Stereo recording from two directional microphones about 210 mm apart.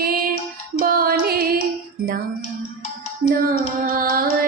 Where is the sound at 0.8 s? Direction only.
45° right (ahead or behind).